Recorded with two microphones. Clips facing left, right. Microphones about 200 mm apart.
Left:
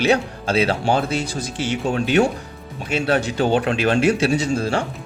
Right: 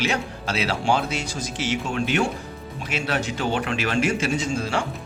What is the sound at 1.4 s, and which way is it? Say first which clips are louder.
Speech: left 3 dB; 35° left (ahead or behind).